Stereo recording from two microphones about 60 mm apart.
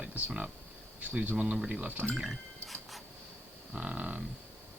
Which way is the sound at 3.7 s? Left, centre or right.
Right.